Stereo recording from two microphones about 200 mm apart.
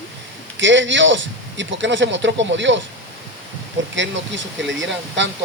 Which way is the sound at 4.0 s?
65° right (ahead or behind).